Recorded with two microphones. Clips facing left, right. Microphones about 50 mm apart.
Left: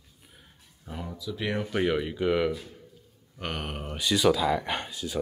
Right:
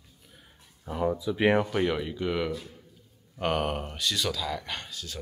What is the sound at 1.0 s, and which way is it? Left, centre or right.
Speech, right.